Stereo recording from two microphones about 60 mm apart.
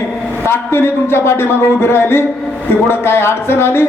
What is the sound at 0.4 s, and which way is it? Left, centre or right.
A man's voice, left.